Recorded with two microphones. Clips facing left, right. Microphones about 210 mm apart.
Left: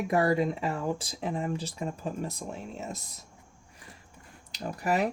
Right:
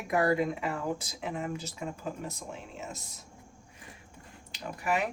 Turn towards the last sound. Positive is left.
turn(degrees=40)  # may be behind; listen again after turning